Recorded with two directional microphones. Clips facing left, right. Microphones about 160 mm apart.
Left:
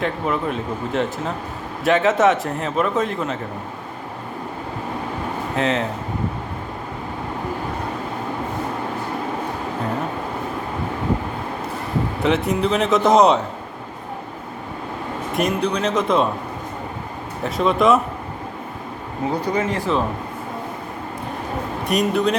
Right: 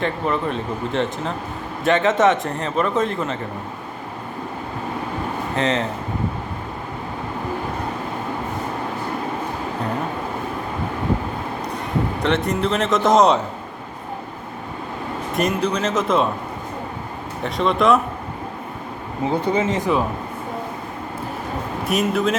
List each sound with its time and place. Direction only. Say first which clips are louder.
0.0 s a man's voice: even; 5° left (ahead or behind)
5.5 s a man's voice: even; centre (ahead or behind)
12.2 s a man's voice: left 3 dB; centre (ahead or behind)
15.4 s a man's voice: even; centre (ahead or behind)
17.4 s a man's voice: left 1 dB; centre (ahead or behind)
19.3 s speech: right 2 dB; 25° right (ahead or behind)
21.8 s a man's voice: left 1 dB; centre (ahead or behind)